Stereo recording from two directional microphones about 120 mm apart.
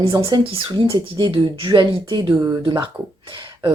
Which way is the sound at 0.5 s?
45° right (ahead or behind).